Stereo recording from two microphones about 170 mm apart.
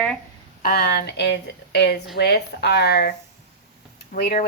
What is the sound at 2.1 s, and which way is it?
Speech, 75° left (ahead or behind).